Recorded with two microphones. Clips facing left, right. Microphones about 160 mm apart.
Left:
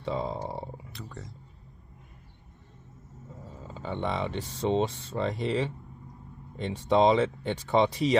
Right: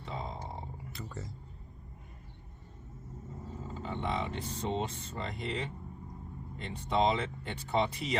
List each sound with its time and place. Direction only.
0.0 s a sound: 85° left
0.9 s speech: centre (ahead or behind)
3.8 s speech: 75° left (ahead or behind)